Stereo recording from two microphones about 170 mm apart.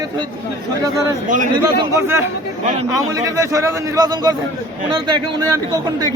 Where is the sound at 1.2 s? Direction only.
50° right (ahead or behind).